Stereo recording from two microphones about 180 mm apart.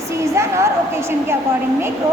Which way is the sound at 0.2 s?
15° right (ahead or behind).